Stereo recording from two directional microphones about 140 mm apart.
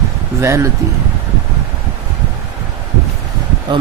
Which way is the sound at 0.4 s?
20° right (ahead or behind).